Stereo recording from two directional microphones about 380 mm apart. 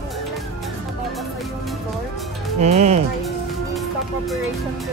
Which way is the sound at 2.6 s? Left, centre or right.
Centre.